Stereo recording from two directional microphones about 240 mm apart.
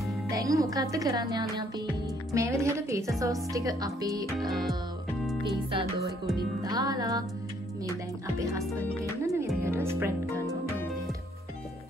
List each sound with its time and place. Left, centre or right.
0.3 s speech: centre
4.4 s music: centre
5.7 s music: right
6.3 s speech: centre
9.2 s music: centre
9.6 s speech: centre
10.3 s music: centre